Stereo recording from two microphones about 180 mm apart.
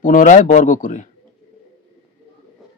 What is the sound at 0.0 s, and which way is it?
Speech, 45° left (ahead or behind).